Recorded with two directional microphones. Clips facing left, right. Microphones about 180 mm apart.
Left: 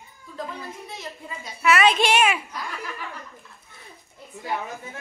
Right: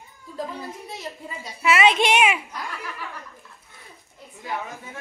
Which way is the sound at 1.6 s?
20° right (ahead or behind).